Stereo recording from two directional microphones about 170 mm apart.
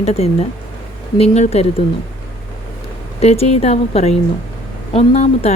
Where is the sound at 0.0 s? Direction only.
40° left (ahead or behind).